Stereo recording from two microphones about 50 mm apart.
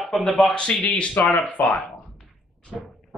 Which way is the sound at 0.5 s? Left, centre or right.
Left.